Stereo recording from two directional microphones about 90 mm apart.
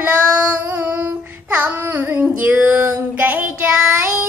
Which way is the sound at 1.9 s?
30° right (ahead or behind).